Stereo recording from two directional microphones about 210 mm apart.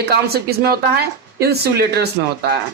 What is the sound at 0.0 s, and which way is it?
Speech, 50° right (ahead or behind).